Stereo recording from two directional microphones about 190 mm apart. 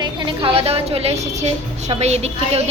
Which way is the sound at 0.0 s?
25° right (ahead or behind).